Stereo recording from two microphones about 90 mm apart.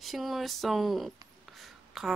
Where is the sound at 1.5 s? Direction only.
Centre (ahead or behind).